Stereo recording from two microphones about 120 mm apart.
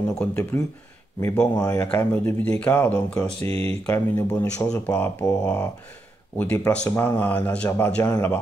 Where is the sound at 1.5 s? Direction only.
25° left (ahead or behind).